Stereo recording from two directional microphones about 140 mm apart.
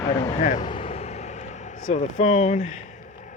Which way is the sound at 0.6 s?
40° left (ahead or behind).